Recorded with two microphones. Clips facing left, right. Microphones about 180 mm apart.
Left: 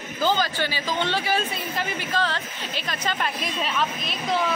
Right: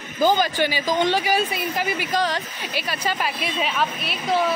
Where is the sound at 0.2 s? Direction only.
15° right (ahead or behind).